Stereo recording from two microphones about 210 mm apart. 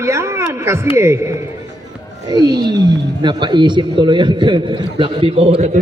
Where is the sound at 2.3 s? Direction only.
20° right (ahead or behind).